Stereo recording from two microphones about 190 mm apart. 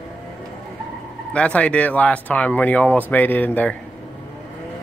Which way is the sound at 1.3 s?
5° left (ahead or behind).